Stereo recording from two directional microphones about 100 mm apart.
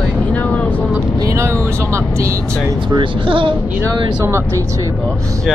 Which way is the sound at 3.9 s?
30° right (ahead or behind).